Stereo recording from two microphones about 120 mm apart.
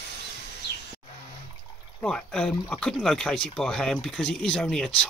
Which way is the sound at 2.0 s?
5° left (ahead or behind).